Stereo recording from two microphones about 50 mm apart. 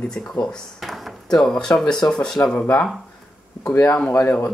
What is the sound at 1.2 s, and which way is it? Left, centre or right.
Speech, centre.